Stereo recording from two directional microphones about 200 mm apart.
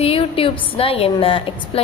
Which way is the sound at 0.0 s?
30° left (ahead or behind).